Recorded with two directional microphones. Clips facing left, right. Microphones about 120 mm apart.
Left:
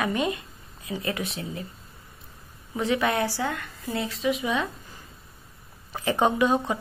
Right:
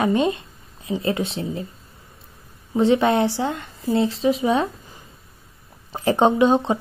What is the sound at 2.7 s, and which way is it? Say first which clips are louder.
Speech: right 8 dB; 30° right (ahead or behind).